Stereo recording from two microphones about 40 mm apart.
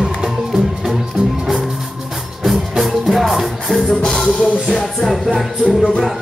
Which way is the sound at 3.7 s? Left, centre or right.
Centre.